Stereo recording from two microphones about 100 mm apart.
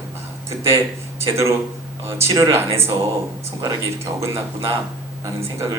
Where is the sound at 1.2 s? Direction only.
30° right (ahead or behind).